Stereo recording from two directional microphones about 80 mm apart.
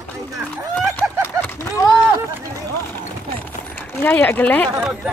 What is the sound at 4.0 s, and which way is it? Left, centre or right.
Speech, left.